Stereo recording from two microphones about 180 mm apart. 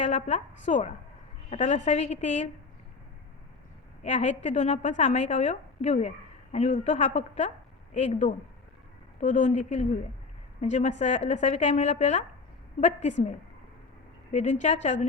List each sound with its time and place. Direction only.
0.0 s a woman's voice: 40° left (ahead or behind)
4.0 s a woman's voice: 40° left (ahead or behind)
14.3 s a woman's voice: 40° left (ahead or behind)